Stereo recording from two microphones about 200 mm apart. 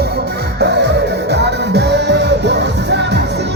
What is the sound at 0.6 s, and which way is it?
Music, 60° right (ahead or behind).